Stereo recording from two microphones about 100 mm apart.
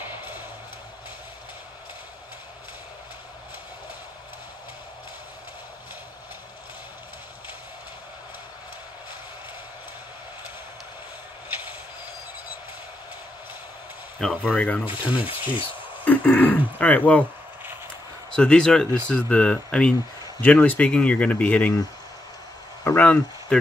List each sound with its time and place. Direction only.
14.2 s speech: 15° left (ahead or behind)
14.9 s speech: 55° left (ahead or behind)
16.0 s speech: 15° left (ahead or behind)
18.3 s speech: 10° left (ahead or behind)
22.9 s speech: 10° left (ahead or behind)